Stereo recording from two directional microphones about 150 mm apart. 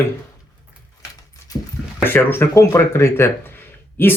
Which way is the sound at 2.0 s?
15° left (ahead or behind).